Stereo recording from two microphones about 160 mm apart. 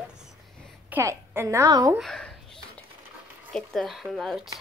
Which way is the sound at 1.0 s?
20° right (ahead or behind).